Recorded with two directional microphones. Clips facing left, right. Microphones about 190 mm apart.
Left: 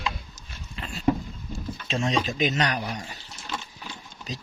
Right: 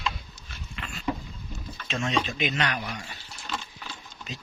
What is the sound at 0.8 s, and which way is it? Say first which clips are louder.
Dog: left 3 dB; 35° left (ahead or behind).